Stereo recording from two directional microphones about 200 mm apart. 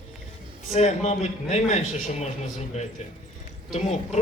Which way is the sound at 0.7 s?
30° left (ahead or behind).